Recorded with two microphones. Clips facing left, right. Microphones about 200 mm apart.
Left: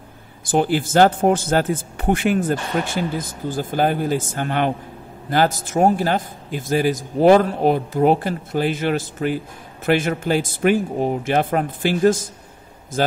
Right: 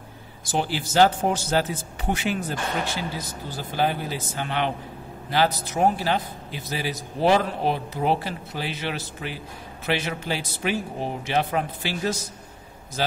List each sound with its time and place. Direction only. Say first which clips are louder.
0.5 s speech: left 8 dB; 50° left (ahead or behind)